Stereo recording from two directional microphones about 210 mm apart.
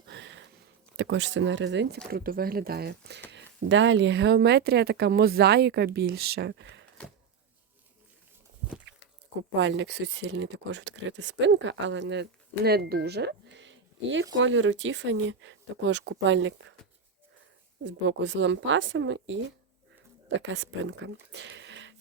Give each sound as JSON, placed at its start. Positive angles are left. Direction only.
{"t": 0.1, "sound": "a sound", "side_deg": -60}
{"t": 0.9, "sound": "speech", "side_deg": -60}
{"t": 2.0, "sound": "speech", "side_deg": -45}
{"t": 9.6, "sound": "speech", "side_deg": -60}
{"t": 17.8, "sound": "speech", "side_deg": -60}